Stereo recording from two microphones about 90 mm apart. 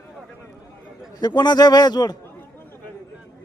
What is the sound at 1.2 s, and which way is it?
Speech, 50° left (ahead or behind).